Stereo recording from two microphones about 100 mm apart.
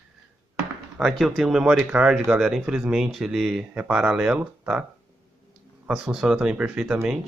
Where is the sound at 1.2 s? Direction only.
5° right (ahead or behind).